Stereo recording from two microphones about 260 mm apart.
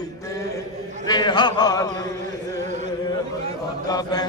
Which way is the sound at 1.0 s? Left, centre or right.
Centre.